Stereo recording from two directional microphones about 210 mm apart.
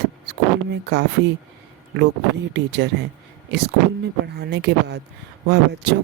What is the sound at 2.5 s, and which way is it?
Speech, 55° right (ahead or behind).